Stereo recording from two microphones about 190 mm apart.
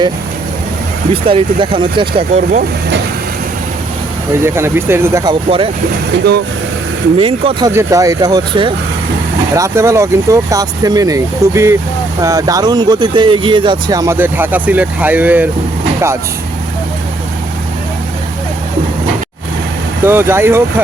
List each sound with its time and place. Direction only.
1.1 s speech: 30° right (ahead or behind)
4.4 s speech: 15° right (ahead or behind)
7.2 s speech: 30° right (ahead or behind)
7.7 s speech: 15° right (ahead or behind)
20.1 s speech: 10° right (ahead or behind)